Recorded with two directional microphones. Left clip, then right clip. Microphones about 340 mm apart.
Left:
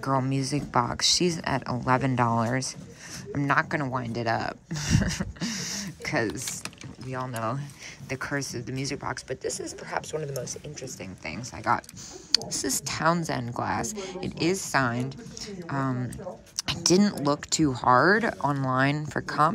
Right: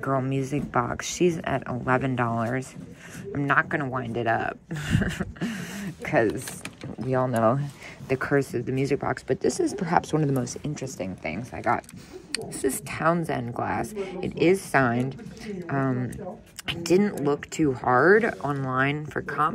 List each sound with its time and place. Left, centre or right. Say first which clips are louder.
0.0 s speech: even; centre
0.4 s speech: right 1 dB; left
0.7 s speech: left 3 dB; centre
11.2 s speech: even; centre
13.8 s speech: right 2 dB; left
14.4 s speech: right 4 dB; centre